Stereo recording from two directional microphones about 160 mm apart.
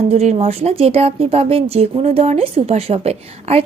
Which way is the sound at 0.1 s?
40° right (ahead or behind).